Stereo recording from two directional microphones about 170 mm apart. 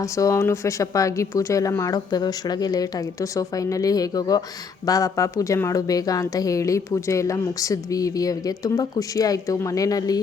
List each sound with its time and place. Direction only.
0.0 s speech: 20° left (ahead or behind)